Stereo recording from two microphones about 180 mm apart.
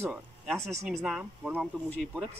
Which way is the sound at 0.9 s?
5° right (ahead or behind).